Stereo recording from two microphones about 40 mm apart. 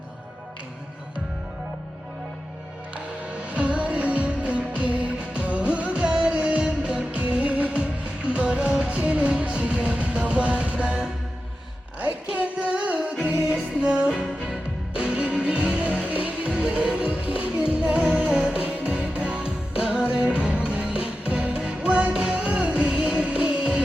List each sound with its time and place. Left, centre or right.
3.5 s music: right
12.3 s singing: right
13.2 s music: right
14.1 s music: centre
14.9 s music: right
16.0 s music: right
22.1 s music: centre